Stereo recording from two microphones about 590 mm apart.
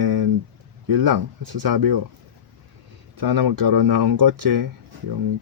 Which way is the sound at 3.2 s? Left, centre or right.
Right.